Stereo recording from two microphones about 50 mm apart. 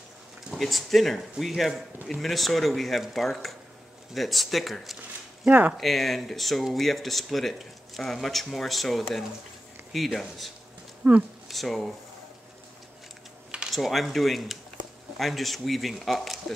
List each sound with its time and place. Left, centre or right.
0.6 s speech: centre
5.5 s speech: right
5.8 s speech: centre
11.0 s speech: right
11.4 s speech: centre
13.7 s speech: centre